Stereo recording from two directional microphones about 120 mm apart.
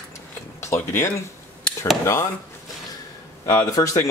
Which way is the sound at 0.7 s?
25° left (ahead or behind).